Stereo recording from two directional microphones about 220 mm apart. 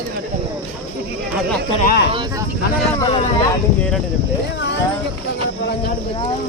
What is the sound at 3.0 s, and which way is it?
Speech, 20° left (ahead or behind).